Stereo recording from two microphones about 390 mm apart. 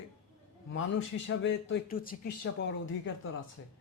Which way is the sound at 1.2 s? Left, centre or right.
Left.